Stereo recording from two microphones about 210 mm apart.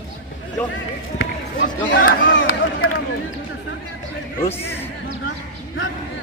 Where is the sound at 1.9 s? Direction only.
65° left (ahead or behind).